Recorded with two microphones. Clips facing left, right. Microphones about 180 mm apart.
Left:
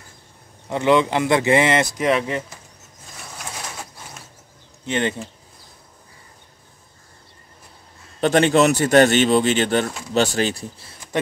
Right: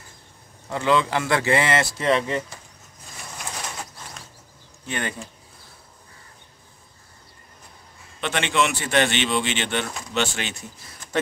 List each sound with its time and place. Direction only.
0.7 s speech: 20° left (ahead or behind)
4.8 s speech: 20° left (ahead or behind)
8.2 s speech: 40° left (ahead or behind)